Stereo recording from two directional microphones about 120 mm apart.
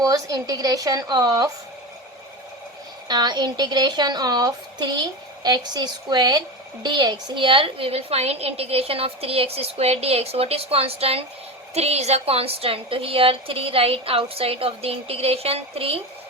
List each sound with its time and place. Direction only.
0.0 s a woman's voice: 30° right (ahead or behind)
3.1 s a woman's voice: 35° right (ahead or behind); by 16.0 s 55° right (ahead or behind)